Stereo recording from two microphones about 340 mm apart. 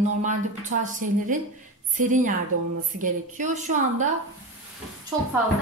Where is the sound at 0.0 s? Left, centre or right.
Right.